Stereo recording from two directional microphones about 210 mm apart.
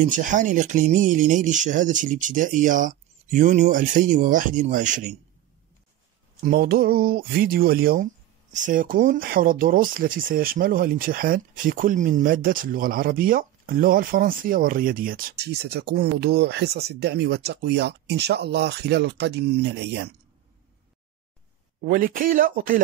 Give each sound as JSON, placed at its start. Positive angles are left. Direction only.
{"t": 0.0, "sound": "speech", "side_deg": -35}
{"t": 6.4, "sound": "speech", "side_deg": -45}
{"t": 21.8, "sound": "speech", "side_deg": -40}